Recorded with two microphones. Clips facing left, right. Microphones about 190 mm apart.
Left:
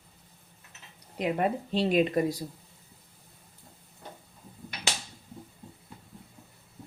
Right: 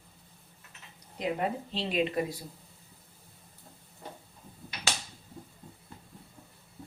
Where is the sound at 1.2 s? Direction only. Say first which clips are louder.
Left 3 dB; 50° left (ahead or behind).